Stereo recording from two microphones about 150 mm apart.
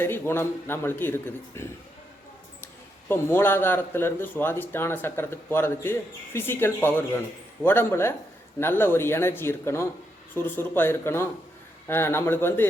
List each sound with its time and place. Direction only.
0.0 s speech: 15° left (ahead or behind)
3.1 s speech: 15° left (ahead or behind)